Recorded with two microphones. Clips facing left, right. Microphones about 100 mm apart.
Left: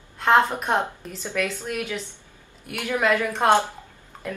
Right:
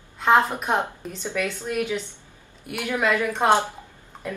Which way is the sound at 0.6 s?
Centre (ahead or behind).